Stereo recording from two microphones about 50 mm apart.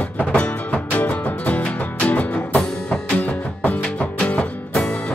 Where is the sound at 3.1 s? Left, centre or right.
Left.